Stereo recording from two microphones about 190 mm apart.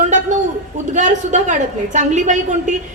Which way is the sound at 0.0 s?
40° right (ahead or behind).